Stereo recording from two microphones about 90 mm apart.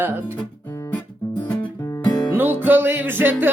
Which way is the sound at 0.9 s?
15° left (ahead or behind).